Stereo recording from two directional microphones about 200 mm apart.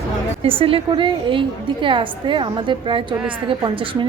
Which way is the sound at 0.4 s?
30° right (ahead or behind).